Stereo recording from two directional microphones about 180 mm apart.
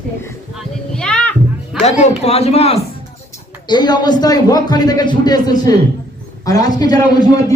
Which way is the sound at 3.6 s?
25° left (ahead or behind).